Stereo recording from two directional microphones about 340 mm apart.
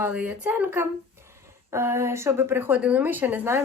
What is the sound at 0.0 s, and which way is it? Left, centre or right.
Speech, centre.